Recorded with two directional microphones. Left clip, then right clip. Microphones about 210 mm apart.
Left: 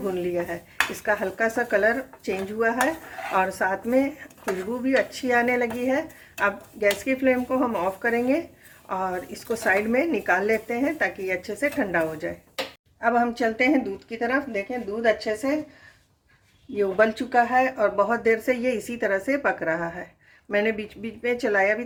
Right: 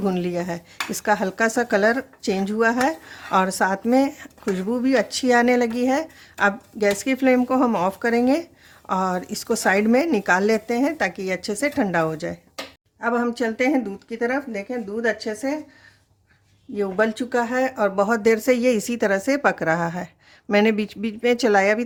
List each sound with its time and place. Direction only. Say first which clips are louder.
0.0 s a woman's voice: right 2 dB; 60° right (ahead or behind)
13.0 s speech: left 1 dB; 45° right (ahead or behind)
16.7 s a woman's voice: left 1 dB; 40° right (ahead or behind); by 21.8 s 55° right (ahead or behind)